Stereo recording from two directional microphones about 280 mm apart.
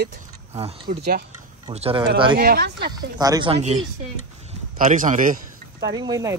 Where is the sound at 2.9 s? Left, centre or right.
Centre.